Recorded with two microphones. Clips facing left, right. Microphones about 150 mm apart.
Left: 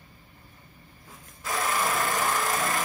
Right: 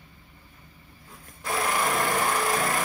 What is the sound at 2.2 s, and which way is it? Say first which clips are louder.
Light engine: right 2 dB; 20° right (ahead or behind).